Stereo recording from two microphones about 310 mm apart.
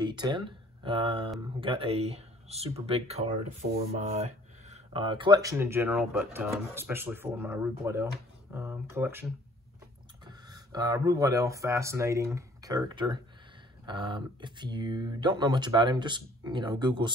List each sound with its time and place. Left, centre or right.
0.0 s speech: centre